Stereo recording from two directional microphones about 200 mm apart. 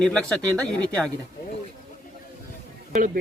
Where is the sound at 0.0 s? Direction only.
5° left (ahead or behind).